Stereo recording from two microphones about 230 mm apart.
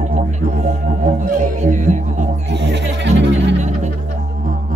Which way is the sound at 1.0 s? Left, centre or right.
Right.